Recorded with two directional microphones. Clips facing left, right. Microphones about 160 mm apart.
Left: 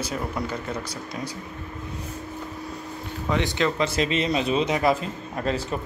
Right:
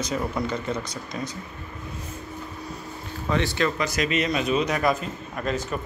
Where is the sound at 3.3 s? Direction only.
20° left (ahead or behind).